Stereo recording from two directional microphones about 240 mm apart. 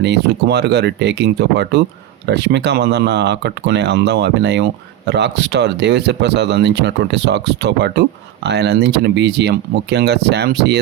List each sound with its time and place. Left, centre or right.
0.0 s speech: right